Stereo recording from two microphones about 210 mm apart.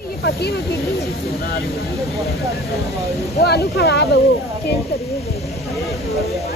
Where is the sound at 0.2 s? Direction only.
50° left (ahead or behind).